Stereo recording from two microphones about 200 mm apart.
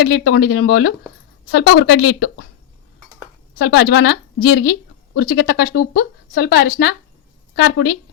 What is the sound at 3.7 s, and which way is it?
A woman's voice, 55° left (ahead or behind).